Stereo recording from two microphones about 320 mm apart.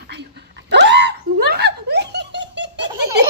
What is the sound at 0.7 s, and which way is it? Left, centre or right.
Giggle, right.